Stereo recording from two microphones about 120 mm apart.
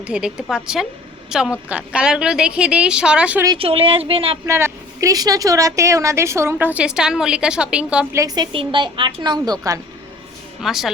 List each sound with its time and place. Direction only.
0.0 s a woman's voice: 5° right (ahead or behind)
3.6 s speech: 50° right (ahead or behind)
4.4 s a woman's voice: 25° right (ahead or behind)
8.4 s a woman's voice: 40° right (ahead or behind)
9.5 s a woman's voice: 30° right (ahead or behind)
10.6 s a woman's voice: centre (ahead or behind)